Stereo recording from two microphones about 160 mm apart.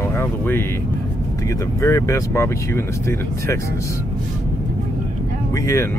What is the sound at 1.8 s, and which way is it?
Speech, 15° left (ahead or behind).